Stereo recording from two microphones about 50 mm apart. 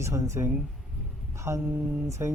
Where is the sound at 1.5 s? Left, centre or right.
Right.